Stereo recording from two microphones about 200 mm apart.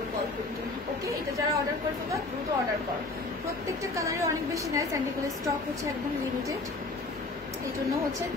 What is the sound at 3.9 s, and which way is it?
Speech, 15° right (ahead or behind).